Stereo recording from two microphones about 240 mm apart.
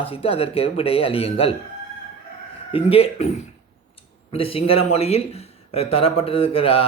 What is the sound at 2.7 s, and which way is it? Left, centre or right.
Speech, left.